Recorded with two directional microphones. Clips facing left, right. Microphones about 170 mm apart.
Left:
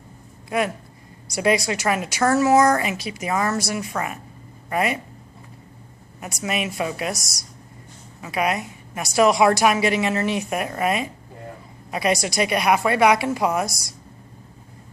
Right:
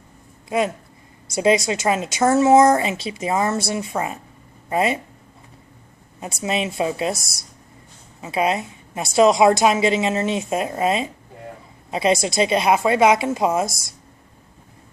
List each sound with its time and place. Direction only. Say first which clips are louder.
0.5 s a woman's voice: right 2 dB; 20° right (ahead or behind)
6.1 s a woman's voice: right 3 dB; 25° right (ahead or behind)